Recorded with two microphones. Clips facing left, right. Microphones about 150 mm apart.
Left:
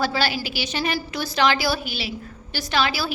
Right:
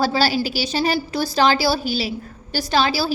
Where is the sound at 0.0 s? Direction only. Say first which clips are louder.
Right 5 dB; 35° right (ahead or behind).